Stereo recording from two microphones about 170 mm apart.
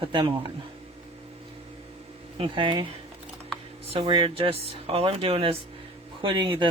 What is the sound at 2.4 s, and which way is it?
Speech, 30° right (ahead or behind).